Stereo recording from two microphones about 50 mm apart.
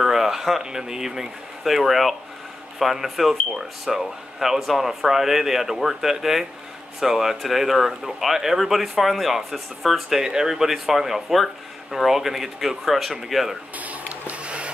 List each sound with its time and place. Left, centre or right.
0.0 s speech: centre
13.7 s printer: right